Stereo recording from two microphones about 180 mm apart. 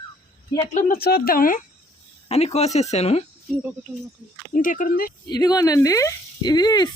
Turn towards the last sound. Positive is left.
turn(degrees=25)  # may be behind; listen again after turning